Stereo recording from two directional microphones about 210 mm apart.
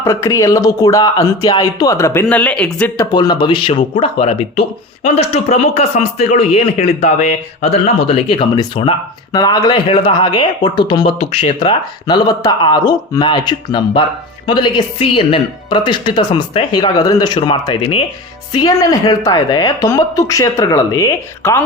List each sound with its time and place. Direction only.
0.0 s a woman's voice: 15° left (ahead or behind)
3.1 s a woman's voice: 20° left (ahead or behind)